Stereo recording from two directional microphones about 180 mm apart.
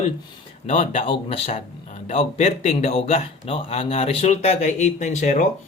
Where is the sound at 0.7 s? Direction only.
30° left (ahead or behind).